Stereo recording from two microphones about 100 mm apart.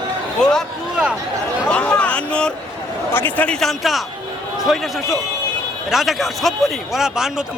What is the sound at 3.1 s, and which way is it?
Speech, 20° left (ahead or behind).